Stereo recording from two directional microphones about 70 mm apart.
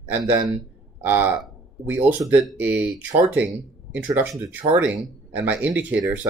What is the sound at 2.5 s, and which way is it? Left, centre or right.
Speech, right.